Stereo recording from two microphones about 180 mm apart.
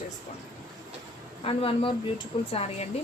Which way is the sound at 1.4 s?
30° left (ahead or behind).